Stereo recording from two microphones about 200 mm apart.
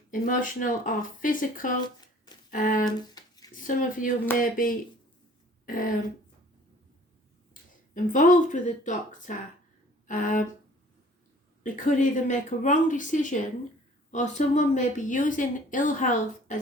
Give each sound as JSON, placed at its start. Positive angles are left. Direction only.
{"t": 0.1, "sound": "speech", "side_deg": 40}
{"t": 2.8, "sound": "a sound", "side_deg": 20}
{"t": 3.5, "sound": "speech", "side_deg": 40}
{"t": 7.9, "sound": "speech", "side_deg": 40}
{"t": 11.6, "sound": "speech", "side_deg": 40}